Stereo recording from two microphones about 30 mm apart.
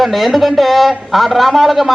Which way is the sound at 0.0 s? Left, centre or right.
Centre.